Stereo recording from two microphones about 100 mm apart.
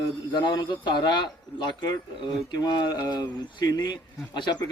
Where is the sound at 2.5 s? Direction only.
45° left (ahead or behind).